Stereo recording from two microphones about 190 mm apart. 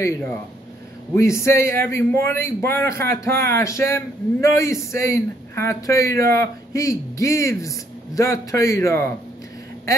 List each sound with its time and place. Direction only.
1.1 s a man's voice: 15° left (ahead or behind)